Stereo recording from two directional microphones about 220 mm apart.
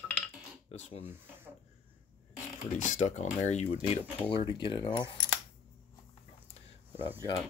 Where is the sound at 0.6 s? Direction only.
30° left (ahead or behind).